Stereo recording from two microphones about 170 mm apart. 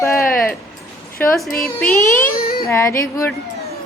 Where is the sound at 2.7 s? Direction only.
15° left (ahead or behind).